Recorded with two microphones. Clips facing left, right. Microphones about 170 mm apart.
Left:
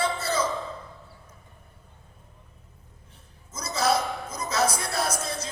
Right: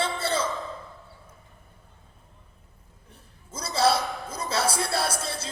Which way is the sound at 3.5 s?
30° right (ahead or behind).